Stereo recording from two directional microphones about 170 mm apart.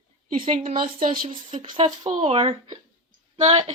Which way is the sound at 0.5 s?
55° right (ahead or behind).